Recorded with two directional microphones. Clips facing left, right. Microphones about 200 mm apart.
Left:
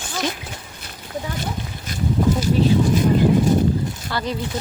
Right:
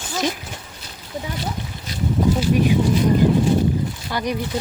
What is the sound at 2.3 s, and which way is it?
Speech, 15° right (ahead or behind).